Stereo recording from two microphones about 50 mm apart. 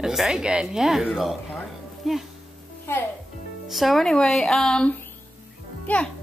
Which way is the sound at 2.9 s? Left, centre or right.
Left.